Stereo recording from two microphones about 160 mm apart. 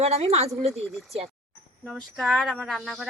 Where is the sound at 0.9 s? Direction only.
Centre (ahead or behind).